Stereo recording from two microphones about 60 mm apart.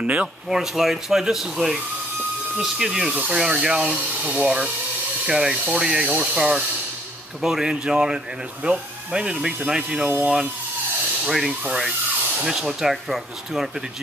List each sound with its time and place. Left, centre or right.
0.0 s speech: right
0.5 s speech: centre; by 4.5 s right
5.2 s speech: centre
10.0 s speech: right
11.2 s speech: centre